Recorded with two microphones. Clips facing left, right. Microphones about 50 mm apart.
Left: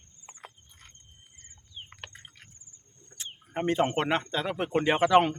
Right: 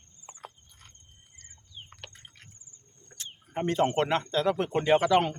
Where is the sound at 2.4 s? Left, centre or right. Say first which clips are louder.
Even; centre.